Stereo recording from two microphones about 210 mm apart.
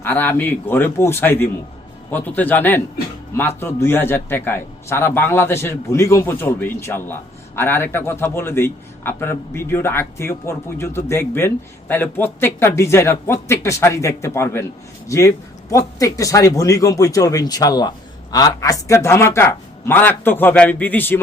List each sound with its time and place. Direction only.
0.0 s a man's voice: 10° left (ahead or behind)